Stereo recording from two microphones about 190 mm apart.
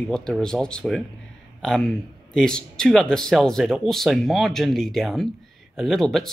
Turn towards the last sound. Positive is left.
turn(degrees=0)  # may be behind; listen again after turning